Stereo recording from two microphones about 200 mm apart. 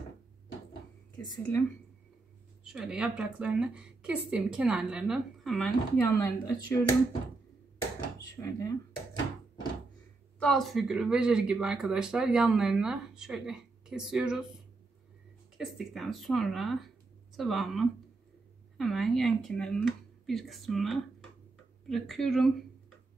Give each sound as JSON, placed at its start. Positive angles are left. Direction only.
{"t": 1.1, "sound": "speech", "side_deg": 20}
{"t": 2.6, "sound": "speech", "side_deg": -5}
{"t": 6.1, "sound": "speech", "side_deg": 15}
{"t": 8.4, "sound": "speech", "side_deg": 15}
{"t": 10.4, "sound": "speech", "side_deg": 0}